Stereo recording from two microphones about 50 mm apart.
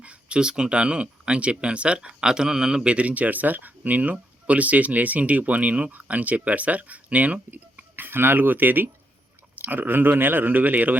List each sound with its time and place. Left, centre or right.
0.0 s speech: right
2.8 s speech: right